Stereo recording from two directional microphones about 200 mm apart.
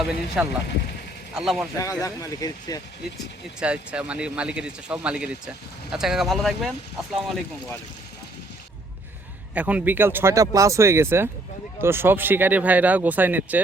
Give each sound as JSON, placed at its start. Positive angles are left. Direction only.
{"t": 0.4, "sound": "speech", "side_deg": -5}
{"t": 1.8, "sound": "speech", "side_deg": 15}
{"t": 3.6, "sound": "speech", "side_deg": -5}
{"t": 9.6, "sound": "speech", "side_deg": -5}